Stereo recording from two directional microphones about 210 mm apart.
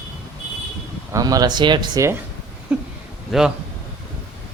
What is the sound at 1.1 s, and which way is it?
Speech, 15° right (ahead or behind).